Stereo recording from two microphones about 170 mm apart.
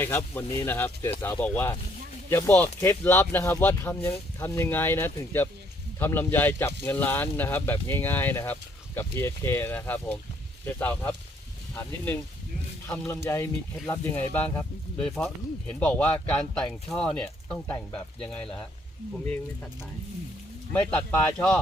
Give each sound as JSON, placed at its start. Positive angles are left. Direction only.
{"t": 0.0, "sound": "speech", "side_deg": 15}
{"t": 13.2, "sound": "speech", "side_deg": 15}
{"t": 20.7, "sound": "speech", "side_deg": 10}